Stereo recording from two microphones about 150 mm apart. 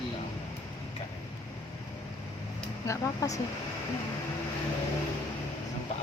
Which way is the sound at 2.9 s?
20° left (ahead or behind).